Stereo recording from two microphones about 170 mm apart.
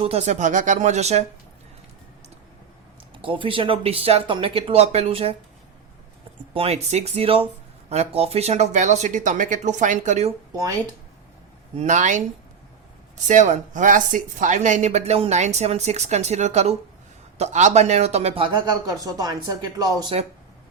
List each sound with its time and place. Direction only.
0.0 s speech: 40° right (ahead or behind)
3.2 s speech: 30° right (ahead or behind)
6.5 s speech: 35° right (ahead or behind)
10.5 s speech: 20° right (ahead or behind)
11.8 s speech: 45° right (ahead or behind)
13.2 s speech: 45° right (ahead or behind); by 20.1 s 25° right (ahead or behind)